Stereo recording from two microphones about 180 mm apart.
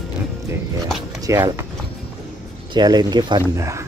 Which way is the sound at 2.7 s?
25° right (ahead or behind).